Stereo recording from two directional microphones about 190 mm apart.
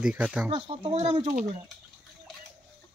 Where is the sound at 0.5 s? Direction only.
25° right (ahead or behind).